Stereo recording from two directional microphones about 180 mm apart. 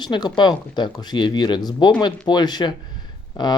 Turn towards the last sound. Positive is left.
turn(degrees=25)  # may be behind; listen again after turning